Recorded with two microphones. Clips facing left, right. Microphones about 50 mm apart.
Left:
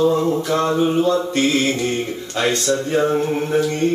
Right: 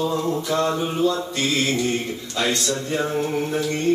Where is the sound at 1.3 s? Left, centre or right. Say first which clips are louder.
Left 4 dB; left.